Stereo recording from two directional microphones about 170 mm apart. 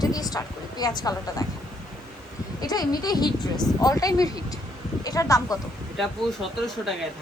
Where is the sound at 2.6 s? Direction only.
25° left (ahead or behind).